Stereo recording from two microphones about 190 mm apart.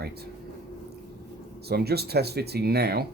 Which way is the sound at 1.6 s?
55° right (ahead or behind).